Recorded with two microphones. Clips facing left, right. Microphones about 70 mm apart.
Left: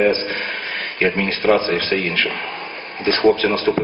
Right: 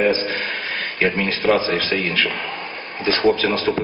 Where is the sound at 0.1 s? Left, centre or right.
Left.